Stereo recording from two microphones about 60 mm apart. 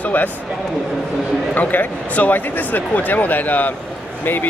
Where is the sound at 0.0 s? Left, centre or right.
Left.